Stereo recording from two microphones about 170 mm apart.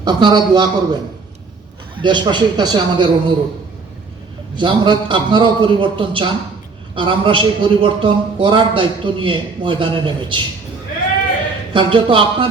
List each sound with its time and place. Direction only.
0.0 s a man's voice: 25° right (ahead or behind)
2.0 s a man's voice: 25° right (ahead or behind)
4.5 s a man's voice: 25° right (ahead or behind)
11.7 s a man's voice: 30° right (ahead or behind)